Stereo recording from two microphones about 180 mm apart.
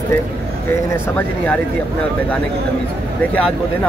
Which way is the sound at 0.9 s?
10° left (ahead or behind).